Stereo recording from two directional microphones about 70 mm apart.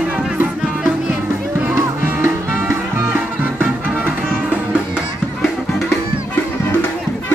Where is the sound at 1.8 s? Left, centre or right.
Right.